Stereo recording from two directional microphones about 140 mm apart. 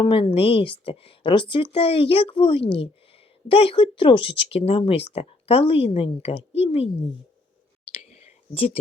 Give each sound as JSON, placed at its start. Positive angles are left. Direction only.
{"t": 0.0, "sound": "a woman's voice", "side_deg": 40}
{"t": 7.9, "sound": "whispering", "side_deg": 45}